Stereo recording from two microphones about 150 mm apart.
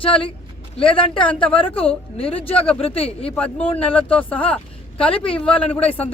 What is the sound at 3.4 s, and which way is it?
Speech, 5° left (ahead or behind).